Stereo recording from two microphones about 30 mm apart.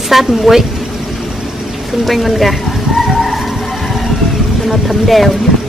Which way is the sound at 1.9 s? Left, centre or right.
Centre.